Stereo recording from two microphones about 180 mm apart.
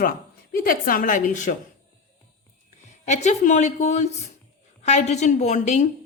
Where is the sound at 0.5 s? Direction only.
55° left (ahead or behind).